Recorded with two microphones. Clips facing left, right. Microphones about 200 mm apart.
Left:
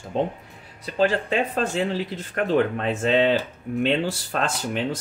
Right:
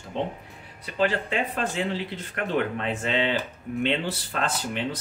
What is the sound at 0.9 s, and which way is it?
Speech, 45° left (ahead or behind).